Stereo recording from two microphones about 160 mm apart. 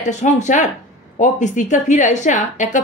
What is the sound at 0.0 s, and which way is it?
A woman's voice, 50° left (ahead or behind).